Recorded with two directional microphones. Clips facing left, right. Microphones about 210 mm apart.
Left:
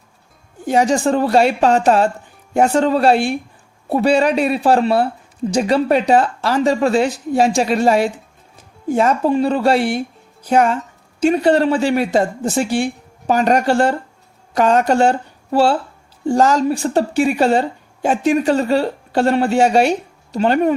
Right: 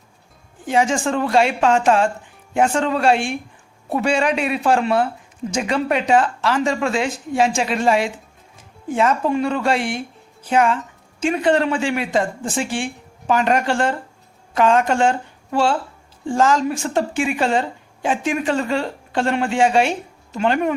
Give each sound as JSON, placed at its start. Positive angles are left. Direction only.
{"t": 0.6, "sound": "speech", "side_deg": 40}